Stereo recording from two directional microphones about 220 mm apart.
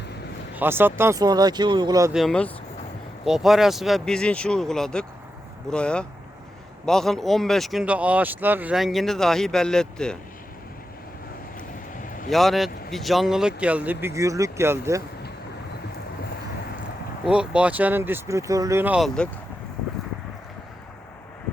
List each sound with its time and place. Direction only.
0.5 s speech: 10° right (ahead or behind)
2.1 s speech: 5° left (ahead or behind)
11.9 s vehicle: 35° left (ahead or behind)
12.3 s speech: centre (ahead or behind)
17.2 s speech: 5° right (ahead or behind)